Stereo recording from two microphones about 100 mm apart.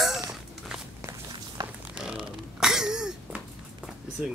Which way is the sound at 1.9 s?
10° right (ahead or behind).